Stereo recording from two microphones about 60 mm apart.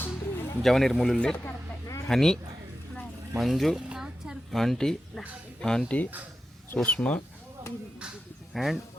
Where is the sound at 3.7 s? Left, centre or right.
Centre.